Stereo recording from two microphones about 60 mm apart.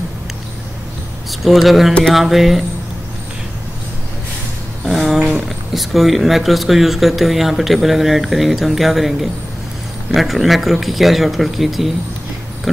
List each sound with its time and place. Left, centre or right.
1.4 s speech: centre
4.8 s a sound: centre
5.4 s speech: centre